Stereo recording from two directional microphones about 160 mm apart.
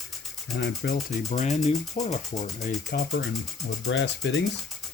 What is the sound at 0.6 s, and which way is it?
Speech, 90° left.